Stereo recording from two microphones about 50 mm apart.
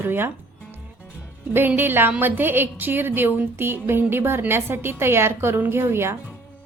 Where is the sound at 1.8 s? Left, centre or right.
Right.